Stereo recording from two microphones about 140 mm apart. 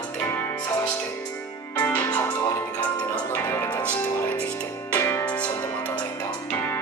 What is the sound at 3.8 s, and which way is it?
Music, 10° left (ahead or behind).